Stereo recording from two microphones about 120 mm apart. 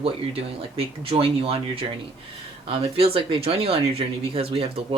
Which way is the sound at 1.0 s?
50° right (ahead or behind).